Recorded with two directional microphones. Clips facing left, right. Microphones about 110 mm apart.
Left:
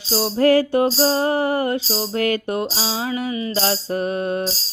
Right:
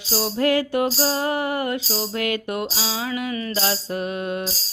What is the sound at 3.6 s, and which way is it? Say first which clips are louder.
Music: left 5 dB; 35° left (ahead or behind).